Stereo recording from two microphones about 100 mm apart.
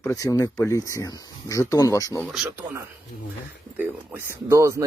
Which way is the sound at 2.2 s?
10° right (ahead or behind).